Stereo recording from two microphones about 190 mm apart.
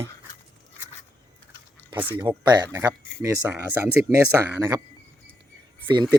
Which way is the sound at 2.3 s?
20° right (ahead or behind).